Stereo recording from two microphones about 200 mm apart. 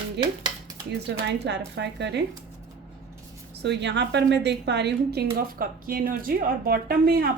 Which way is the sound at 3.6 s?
60° right (ahead or behind).